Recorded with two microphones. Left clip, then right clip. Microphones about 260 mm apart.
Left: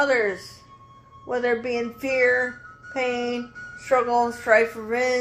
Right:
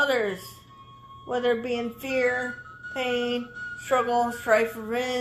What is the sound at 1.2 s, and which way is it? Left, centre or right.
Speech, right.